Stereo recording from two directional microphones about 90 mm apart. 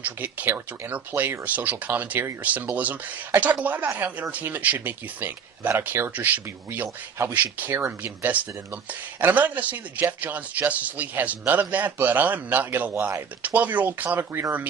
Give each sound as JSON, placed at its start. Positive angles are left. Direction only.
{"t": 0.0, "sound": "speech", "side_deg": -20}